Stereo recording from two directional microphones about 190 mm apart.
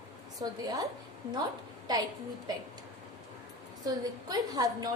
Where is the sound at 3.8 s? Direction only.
20° right (ahead or behind).